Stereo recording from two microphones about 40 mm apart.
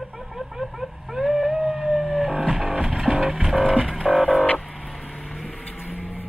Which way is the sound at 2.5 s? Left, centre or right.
Centre.